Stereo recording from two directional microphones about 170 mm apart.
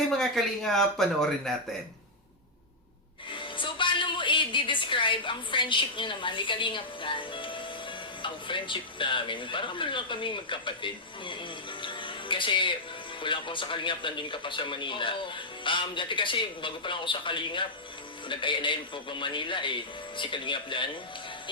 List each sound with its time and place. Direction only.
0.2 s speech: centre (ahead or behind)
3.3 s a woman's voice: 30° left (ahead or behind)
11.8 s music: 30° left (ahead or behind)
13.2 s speech: 30° left (ahead or behind)